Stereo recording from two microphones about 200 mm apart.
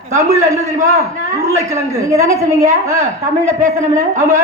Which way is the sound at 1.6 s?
15° right (ahead or behind).